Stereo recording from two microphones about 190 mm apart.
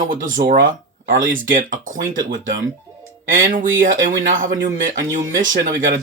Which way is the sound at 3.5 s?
45° right (ahead or behind).